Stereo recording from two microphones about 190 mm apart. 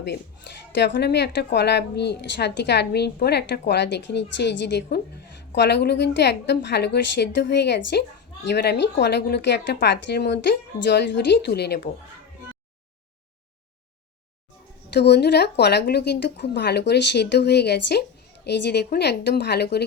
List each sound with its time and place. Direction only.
0.7 s a woman's voice: 65° left (ahead or behind)
14.9 s a woman's voice: 60° left (ahead or behind)